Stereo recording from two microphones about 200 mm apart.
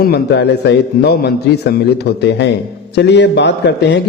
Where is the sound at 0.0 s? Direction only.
55° left (ahead or behind).